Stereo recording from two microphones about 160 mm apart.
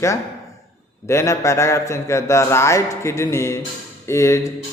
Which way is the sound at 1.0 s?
20° left (ahead or behind).